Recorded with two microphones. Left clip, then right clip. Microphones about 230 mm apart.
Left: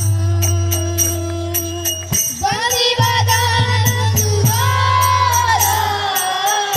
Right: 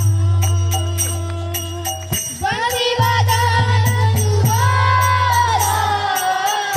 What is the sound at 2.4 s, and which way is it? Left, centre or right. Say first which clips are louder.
Music: left 1 dB; left.